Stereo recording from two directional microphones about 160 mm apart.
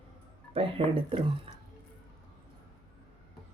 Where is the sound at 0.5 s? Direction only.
35° right (ahead or behind).